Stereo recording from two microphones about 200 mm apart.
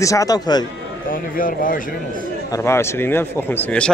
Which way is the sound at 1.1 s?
45° left (ahead or behind).